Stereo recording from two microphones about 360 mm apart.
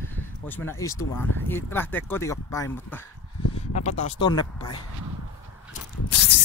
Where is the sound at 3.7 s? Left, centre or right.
Centre.